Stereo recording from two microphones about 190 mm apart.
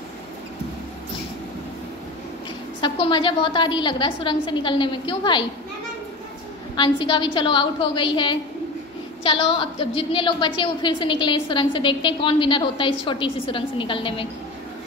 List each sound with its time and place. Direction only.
2.8 s a woman's voice: 25° left (ahead or behind)
6.8 s a woman's voice: 25° left (ahead or behind)